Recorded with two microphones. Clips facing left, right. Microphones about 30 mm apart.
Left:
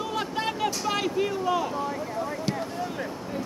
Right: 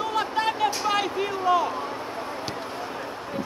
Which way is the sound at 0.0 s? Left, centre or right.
Centre.